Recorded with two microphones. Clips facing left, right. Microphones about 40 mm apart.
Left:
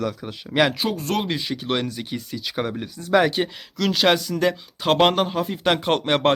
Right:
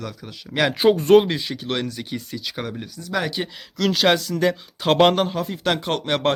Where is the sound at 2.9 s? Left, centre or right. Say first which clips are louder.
Left 8 dB; left.